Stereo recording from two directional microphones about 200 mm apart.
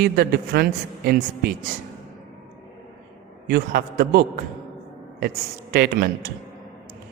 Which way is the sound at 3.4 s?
50° right (ahead or behind).